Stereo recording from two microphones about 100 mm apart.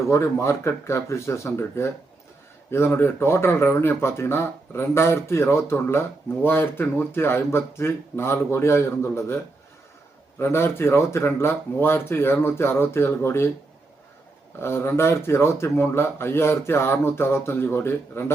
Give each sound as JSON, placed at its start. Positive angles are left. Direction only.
{"t": 0.1, "sound": "speech", "side_deg": 30}
{"t": 14.6, "sound": "speech", "side_deg": 25}